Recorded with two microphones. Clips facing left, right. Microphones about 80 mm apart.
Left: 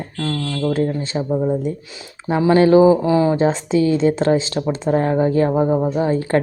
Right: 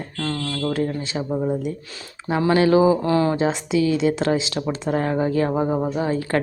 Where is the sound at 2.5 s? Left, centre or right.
Left.